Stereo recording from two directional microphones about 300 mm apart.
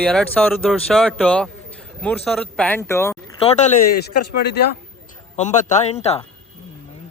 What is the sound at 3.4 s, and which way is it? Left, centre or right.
Speech, left.